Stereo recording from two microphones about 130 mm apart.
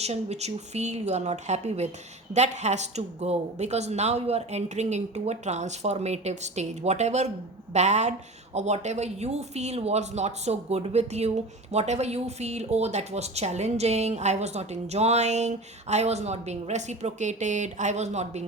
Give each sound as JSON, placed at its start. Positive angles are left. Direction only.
{"t": 0.0, "sound": "speech", "side_deg": -55}